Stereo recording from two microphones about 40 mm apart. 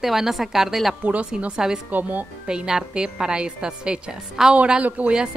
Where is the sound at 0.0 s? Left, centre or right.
Centre.